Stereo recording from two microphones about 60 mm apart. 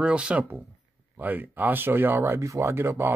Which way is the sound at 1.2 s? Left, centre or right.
Right.